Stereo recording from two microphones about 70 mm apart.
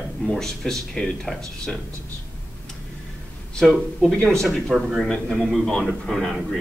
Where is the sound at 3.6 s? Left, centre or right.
Centre.